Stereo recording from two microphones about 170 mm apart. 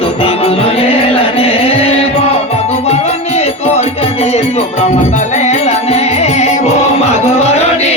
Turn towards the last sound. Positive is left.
turn(degrees=40)  # may be behind; listen again after turning